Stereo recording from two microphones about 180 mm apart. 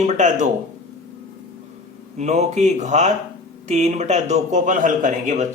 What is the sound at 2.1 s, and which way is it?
Speech, 40° right (ahead or behind).